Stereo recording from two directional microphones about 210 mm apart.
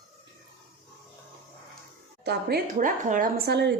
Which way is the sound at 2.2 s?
45° right (ahead or behind).